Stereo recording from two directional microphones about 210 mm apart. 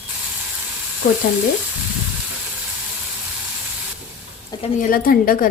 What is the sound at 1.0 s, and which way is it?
Speech, 40° left (ahead or behind).